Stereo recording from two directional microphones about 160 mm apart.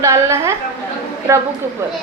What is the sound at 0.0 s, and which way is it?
A woman's voice, 20° right (ahead or behind).